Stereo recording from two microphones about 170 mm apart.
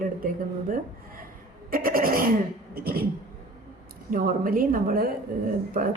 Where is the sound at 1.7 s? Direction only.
55° right (ahead or behind).